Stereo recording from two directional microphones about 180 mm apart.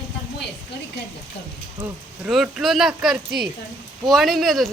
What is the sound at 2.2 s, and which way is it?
Speech, centre (ahead or behind).